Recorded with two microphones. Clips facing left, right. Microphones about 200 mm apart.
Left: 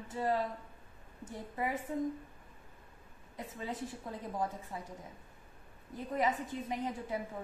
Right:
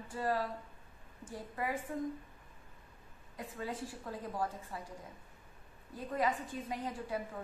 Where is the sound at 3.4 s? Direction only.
20° left (ahead or behind).